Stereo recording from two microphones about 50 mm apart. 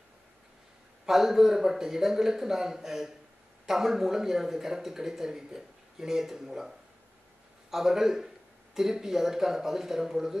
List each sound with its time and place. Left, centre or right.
1.0 s speech: centre
7.7 s speech: centre